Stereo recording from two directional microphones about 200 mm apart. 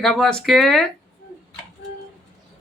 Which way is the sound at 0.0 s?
Centre (ahead or behind).